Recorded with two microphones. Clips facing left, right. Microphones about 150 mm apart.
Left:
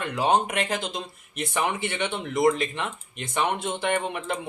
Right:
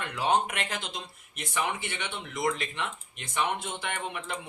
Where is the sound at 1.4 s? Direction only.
60° left (ahead or behind).